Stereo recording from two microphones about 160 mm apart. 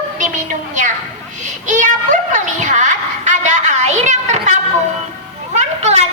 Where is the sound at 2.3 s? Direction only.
50° right (ahead or behind).